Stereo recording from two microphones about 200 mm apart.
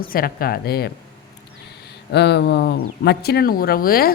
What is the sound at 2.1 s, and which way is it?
Speech, 55° left (ahead or behind).